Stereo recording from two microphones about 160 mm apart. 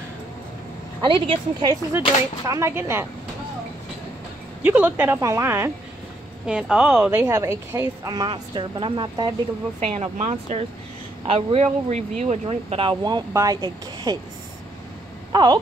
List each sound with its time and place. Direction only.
1.0 s speech: 30° right (ahead or behind)
2.0 s speech: 20° right (ahead or behind)
4.6 s speech: 10° right (ahead or behind)
6.4 s a woman's voice: 5° right (ahead or behind); by 9.3 s 30° right (ahead or behind)
9.8 s speech: 45° right (ahead or behind); by 14.1 s 25° right (ahead or behind)
15.3 s wail: 25° right (ahead or behind)